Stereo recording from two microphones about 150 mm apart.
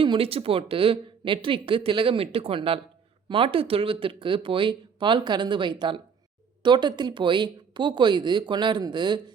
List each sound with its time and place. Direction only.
0.0 s speech: 35° right (ahead or behind)